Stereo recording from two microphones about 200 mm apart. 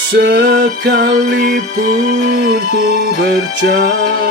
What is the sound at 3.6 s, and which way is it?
Music, 55° right (ahead or behind).